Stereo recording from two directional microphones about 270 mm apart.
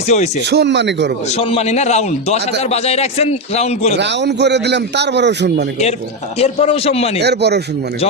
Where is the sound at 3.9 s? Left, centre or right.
Right.